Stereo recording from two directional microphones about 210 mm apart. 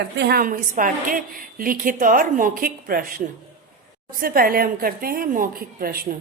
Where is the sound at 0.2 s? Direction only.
45° right (ahead or behind).